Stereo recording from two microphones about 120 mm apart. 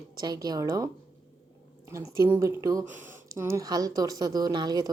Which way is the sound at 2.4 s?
20° right (ahead or behind).